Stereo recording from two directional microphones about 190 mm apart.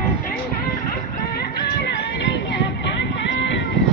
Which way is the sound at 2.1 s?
70° left (ahead or behind).